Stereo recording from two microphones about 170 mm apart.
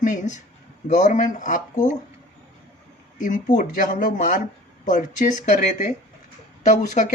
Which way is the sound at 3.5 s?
50° left (ahead or behind).